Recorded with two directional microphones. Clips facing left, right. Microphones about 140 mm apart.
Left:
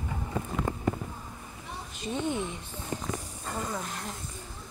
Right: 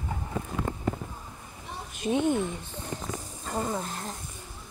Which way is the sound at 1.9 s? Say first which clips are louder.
Right 6 dB; 55° right (ahead or behind).